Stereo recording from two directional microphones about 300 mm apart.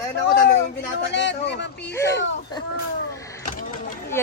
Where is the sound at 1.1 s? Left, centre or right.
Left.